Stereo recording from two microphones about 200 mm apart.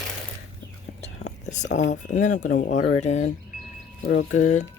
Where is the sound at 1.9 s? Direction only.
40° left (ahead or behind).